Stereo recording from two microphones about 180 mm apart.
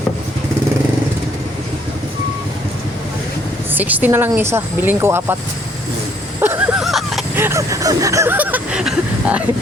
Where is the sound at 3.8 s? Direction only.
10° right (ahead or behind).